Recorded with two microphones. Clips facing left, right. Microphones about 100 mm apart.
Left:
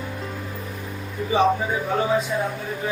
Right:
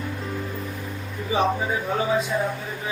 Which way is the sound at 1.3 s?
Centre (ahead or behind).